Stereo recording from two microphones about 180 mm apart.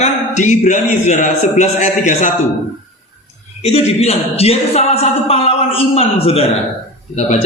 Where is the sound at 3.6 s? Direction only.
35° left (ahead or behind).